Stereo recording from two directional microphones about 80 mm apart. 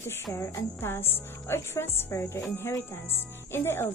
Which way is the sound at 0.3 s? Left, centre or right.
Left.